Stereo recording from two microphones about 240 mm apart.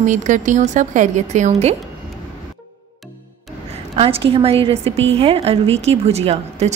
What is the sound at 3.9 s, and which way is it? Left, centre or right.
A woman's voice, right.